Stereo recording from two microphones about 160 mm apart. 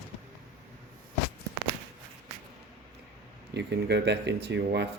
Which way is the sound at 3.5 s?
90° right.